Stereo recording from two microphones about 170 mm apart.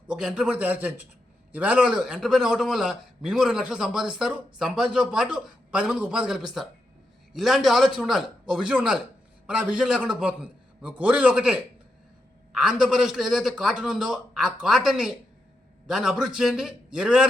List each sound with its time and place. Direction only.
0.1 s a man's voice: 5° right (ahead or behind)